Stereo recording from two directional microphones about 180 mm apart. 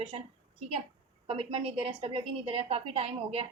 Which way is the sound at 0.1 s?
35° right (ahead or behind).